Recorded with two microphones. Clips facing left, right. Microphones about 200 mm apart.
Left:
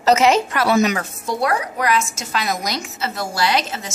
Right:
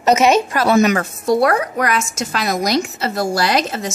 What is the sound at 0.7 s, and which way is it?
A woman's voice, 55° right (ahead or behind).